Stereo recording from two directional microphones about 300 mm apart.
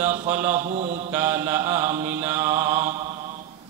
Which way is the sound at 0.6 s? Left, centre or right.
Right.